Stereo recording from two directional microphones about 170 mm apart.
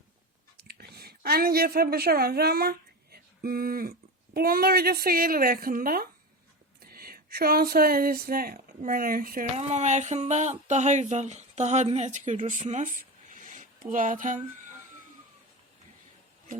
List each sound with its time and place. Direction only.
0.5 s a woman's voice: 70° right (ahead or behind)
9.6 s speech: 40° right (ahead or behind)